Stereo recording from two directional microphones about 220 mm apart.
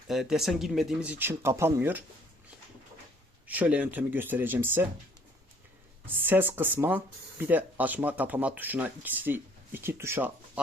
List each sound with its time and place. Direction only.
0.1 s speech: centre (ahead or behind)
3.4 s speech: 5° right (ahead or behind)
6.1 s speech: 10° right (ahead or behind)